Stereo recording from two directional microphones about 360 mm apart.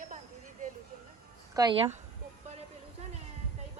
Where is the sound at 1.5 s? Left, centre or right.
Centre.